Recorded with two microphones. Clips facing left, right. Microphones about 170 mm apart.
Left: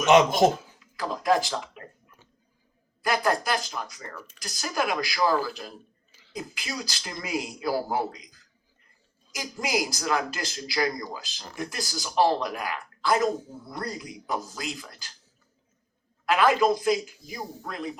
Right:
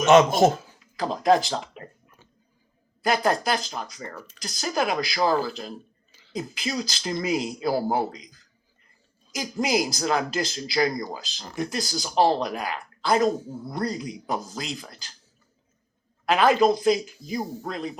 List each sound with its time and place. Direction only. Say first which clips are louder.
0.0 s speech: right 2 dB; 15° left (ahead or behind)
0.9 s speech: right 4 dB; 25° right (ahead or behind)
3.1 s speech: right 2 dB; 25° right (ahead or behind)
3.7 s speech: right 2 dB; 35° right (ahead or behind)
9.6 s speech: right 4 dB; 25° right (ahead or behind)
16.3 s speech: right 2 dB; 20° right (ahead or behind)